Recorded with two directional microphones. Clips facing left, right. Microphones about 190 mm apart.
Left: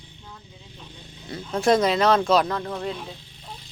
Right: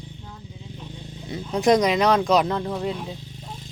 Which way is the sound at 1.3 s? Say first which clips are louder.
Right 2 dB; 15° right (ahead or behind).